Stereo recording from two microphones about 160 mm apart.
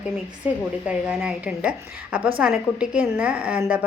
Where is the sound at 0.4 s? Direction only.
10° right (ahead or behind).